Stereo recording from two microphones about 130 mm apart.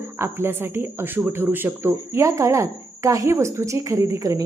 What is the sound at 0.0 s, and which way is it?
Speech, 20° right (ahead or behind).